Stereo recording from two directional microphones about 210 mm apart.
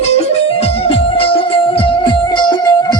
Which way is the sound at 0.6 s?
30° left (ahead or behind).